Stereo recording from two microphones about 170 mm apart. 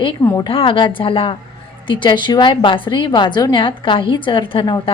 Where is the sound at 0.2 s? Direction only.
15° left (ahead or behind).